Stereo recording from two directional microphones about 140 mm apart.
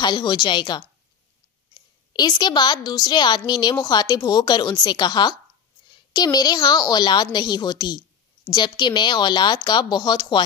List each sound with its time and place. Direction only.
0.0 s a woman's voice: 30° left (ahead or behind)